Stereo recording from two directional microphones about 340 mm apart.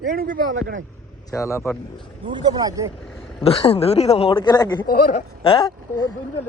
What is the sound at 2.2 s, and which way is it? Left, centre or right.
Speech, centre.